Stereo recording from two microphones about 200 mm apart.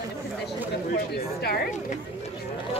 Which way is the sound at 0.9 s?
50° left (ahead or behind).